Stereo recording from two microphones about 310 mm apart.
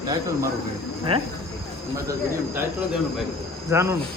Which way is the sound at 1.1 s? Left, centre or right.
Centre.